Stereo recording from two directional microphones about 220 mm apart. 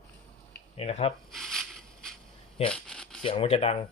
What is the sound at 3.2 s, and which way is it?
Speech, 25° left (ahead or behind).